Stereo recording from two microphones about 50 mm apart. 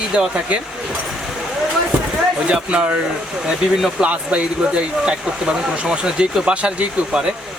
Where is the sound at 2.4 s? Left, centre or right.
Centre.